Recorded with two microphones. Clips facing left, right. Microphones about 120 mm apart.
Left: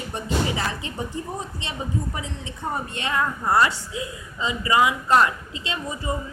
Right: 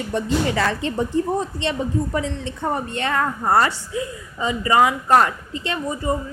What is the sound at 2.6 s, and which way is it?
A woman's voice, 55° right (ahead or behind).